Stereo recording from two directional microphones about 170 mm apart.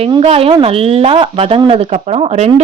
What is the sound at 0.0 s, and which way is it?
Speech, 35° right (ahead or behind).